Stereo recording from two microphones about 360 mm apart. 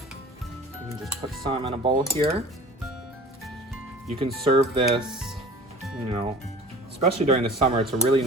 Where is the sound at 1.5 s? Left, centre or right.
Centre.